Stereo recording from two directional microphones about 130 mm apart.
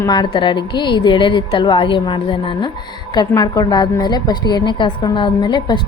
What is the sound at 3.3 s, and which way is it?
A woman's voice, 30° left (ahead or behind).